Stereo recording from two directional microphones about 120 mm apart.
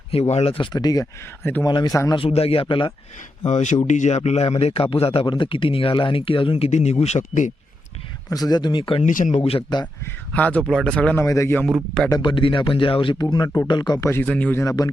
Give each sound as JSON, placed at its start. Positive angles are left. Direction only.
{"t": 0.1, "sound": "speech", "side_deg": 65}
{"t": 0.5, "sound": "speech", "side_deg": 40}
{"t": 2.1, "sound": "speech", "side_deg": 55}
{"t": 3.4, "sound": "speech", "side_deg": 85}
{"t": 6.7, "sound": "speech", "side_deg": 65}
{"t": 7.0, "sound": "speech", "side_deg": 80}
{"t": 8.3, "sound": "speech", "side_deg": 35}
{"t": 9.0, "sound": "speech", "side_deg": 90}
{"t": 9.4, "sound": "speech", "side_deg": 55}
{"t": 9.8, "sound": "speech", "side_deg": 10}
{"t": 11.2, "sound": "speech", "side_deg": 25}
{"t": 12.1, "sound": "speech", "side_deg": 40}
{"t": 14.0, "sound": "speech", "side_deg": 20}
{"t": 14.6, "sound": "speech", "side_deg": 30}